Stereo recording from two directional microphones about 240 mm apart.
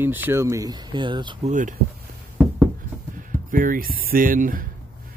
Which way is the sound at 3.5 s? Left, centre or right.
Right.